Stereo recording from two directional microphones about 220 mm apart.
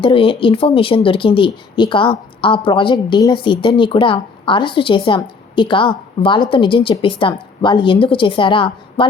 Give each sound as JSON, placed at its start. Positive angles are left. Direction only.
{"t": 0.0, "sound": "speech", "side_deg": 25}